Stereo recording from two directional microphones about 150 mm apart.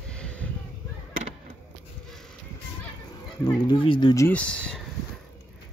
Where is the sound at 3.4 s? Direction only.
35° left (ahead or behind).